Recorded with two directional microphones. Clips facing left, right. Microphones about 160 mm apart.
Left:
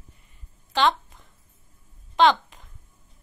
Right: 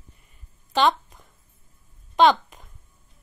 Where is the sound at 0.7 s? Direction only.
20° right (ahead or behind).